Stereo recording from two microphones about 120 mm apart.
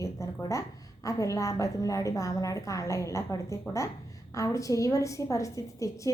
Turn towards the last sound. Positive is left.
turn(degrees=25)  # may be behind; listen again after turning